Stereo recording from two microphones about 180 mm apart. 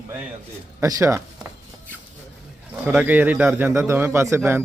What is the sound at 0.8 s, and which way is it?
Speech, 15° right (ahead or behind).